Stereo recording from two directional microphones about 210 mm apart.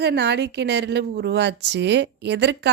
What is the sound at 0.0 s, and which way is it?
A woman's voice, 55° right (ahead or behind).